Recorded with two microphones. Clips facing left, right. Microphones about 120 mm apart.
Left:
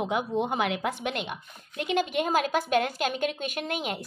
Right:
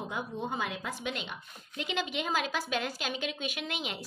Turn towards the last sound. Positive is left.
turn(degrees=50)  # may be behind; listen again after turning